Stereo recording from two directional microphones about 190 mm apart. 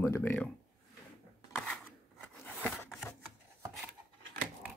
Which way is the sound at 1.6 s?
5° left (ahead or behind).